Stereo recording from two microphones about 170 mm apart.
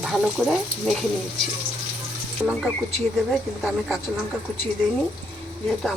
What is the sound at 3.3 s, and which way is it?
Speech, centre (ahead or behind).